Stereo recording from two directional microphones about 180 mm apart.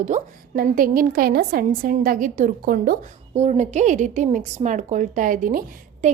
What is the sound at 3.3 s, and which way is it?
A woman's voice, 40° right (ahead or behind).